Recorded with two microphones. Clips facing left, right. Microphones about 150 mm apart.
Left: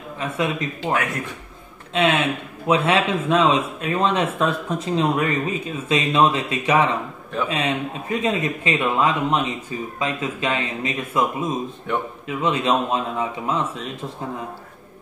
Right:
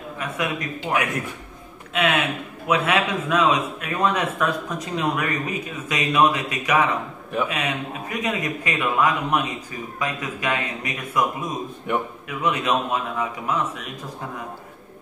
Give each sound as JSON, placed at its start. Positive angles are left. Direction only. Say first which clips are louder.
{"t": 0.2, "sound": "speech", "louder": "left 3 dB", "side_deg": 25}
{"t": 2.0, "sound": "speech", "louder": "left 3 dB", "side_deg": 30}